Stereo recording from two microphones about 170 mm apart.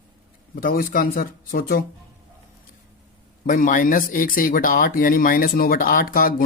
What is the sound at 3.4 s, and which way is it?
Speech, 50° left (ahead or behind).